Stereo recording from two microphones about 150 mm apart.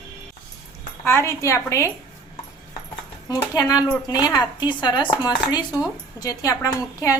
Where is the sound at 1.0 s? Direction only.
15° left (ahead or behind).